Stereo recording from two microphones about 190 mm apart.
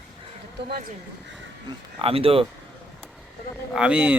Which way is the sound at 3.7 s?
5° right (ahead or behind).